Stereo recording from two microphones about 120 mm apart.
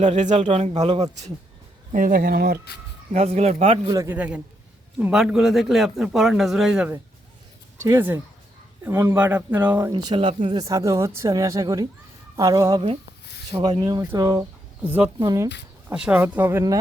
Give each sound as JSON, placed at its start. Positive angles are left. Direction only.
{"t": 0.0, "sound": "speech", "side_deg": -80}
{"t": 1.9, "sound": "speech", "side_deg": -90}
{"t": 3.2, "sound": "speech", "side_deg": -60}
{"t": 3.8, "sound": "speech", "side_deg": -30}
{"t": 4.1, "sound": "a man's voice", "side_deg": -10}
{"t": 7.8, "sound": "speech", "side_deg": -20}
{"t": 9.9, "sound": "speech", "side_deg": -45}
{"t": 10.6, "sound": "speech", "side_deg": -30}
{"t": 13.5, "sound": "speech", "side_deg": -55}
{"t": 13.7, "sound": "speech", "side_deg": -35}
{"t": 14.0, "sound": "speech", "side_deg": -25}
{"t": 14.8, "sound": "speech", "side_deg": -15}
{"t": 15.2, "sound": "speech", "side_deg": -30}
{"t": 15.9, "sound": "speech", "side_deg": -10}